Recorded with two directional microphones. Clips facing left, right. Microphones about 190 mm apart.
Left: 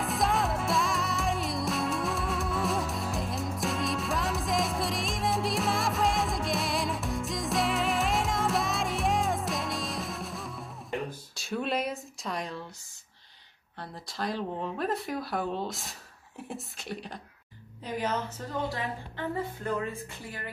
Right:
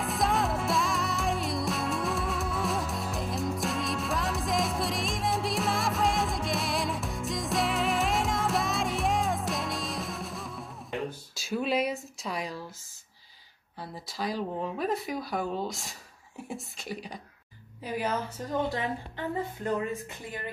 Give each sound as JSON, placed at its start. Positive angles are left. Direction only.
{"t": 0.0, "sound": "music", "side_deg": 0}
{"t": 13.7, "sound": "a woman's voice", "side_deg": 0}